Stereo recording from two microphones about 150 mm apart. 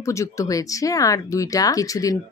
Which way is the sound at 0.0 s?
20° left (ahead or behind).